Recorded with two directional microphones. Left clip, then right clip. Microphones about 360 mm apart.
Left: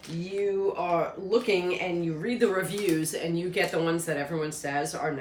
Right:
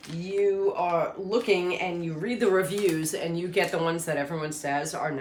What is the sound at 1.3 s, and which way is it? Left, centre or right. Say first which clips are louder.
Speech: even; centre.